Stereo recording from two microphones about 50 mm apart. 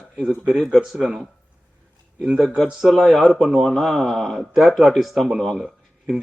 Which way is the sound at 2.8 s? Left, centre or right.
Centre.